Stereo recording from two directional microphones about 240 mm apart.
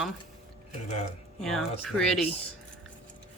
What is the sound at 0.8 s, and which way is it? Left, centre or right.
Speech, left.